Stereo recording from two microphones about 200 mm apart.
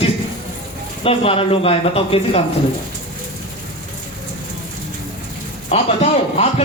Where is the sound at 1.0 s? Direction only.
30° left (ahead or behind).